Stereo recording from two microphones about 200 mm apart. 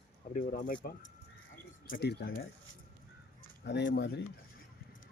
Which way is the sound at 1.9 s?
55° left (ahead or behind).